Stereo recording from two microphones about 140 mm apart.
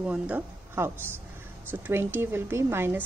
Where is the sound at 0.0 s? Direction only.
10° right (ahead or behind).